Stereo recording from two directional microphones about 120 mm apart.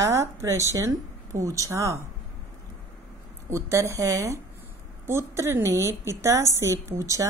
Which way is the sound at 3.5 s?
25° right (ahead or behind).